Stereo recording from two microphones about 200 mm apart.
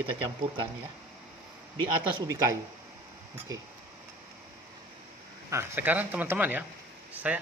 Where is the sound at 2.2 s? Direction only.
15° right (ahead or behind).